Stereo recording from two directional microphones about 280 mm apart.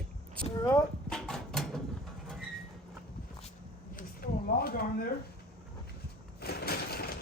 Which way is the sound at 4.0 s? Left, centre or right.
Left.